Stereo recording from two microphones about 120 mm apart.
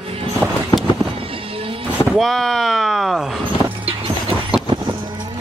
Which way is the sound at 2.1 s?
Centre (ahead or behind).